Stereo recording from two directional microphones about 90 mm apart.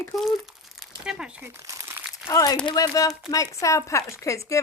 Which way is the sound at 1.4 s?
30° right (ahead or behind).